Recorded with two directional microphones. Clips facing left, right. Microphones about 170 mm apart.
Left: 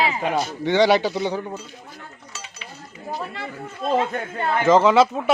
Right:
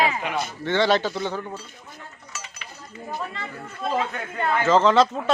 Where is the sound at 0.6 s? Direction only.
15° left (ahead or behind).